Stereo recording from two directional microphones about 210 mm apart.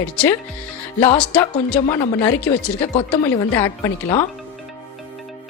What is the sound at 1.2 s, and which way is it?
Music, 5° left (ahead or behind).